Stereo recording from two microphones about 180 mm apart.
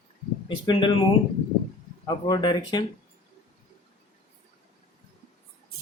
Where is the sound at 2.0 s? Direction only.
25° left (ahead or behind).